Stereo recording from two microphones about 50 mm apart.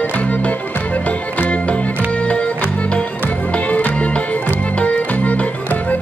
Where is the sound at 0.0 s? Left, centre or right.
Left.